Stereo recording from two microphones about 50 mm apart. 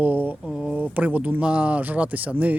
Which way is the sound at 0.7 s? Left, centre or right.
Right.